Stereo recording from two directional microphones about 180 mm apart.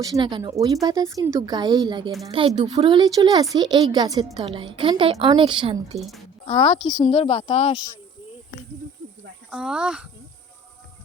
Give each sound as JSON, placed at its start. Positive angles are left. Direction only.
{"t": 0.0, "sound": "speech", "side_deg": -20}
{"t": 6.0, "sound": "speech", "side_deg": 0}
{"t": 7.0, "sound": "speech", "side_deg": 30}
{"t": 9.5, "sound": "speech", "side_deg": -5}